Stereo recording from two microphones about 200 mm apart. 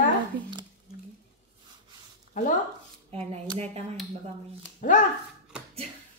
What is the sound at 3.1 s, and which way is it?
Speech, 30° right (ahead or behind).